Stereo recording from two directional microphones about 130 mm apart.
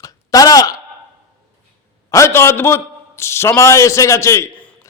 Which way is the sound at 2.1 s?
20° left (ahead or behind).